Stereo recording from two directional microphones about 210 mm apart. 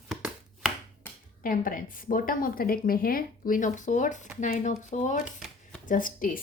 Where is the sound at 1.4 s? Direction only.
40° left (ahead or behind).